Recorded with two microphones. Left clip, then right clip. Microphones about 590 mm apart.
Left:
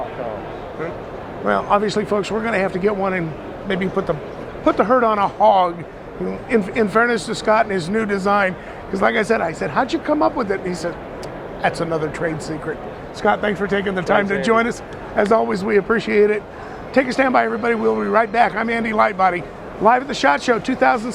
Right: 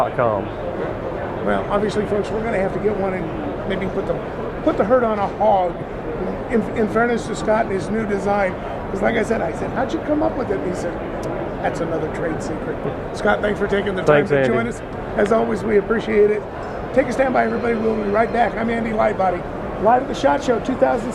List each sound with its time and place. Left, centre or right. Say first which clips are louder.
1.5 s speech: left 4 dB; left
4.6 s speech: left 2 dB; left
13.2 s speech: left 1 dB; left